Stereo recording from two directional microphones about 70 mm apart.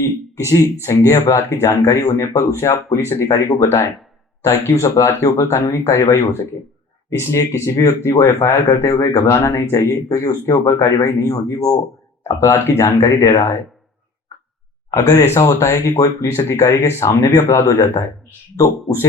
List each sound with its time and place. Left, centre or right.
0.0 s a man's voice: left
12.4 s speech: left
14.8 s speech: left